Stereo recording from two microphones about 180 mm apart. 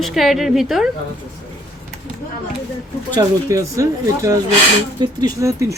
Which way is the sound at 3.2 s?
15° right (ahead or behind).